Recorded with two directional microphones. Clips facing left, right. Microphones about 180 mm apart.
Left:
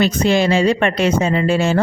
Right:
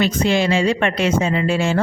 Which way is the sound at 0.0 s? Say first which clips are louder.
Left 2 dB; 40° left (ahead or behind).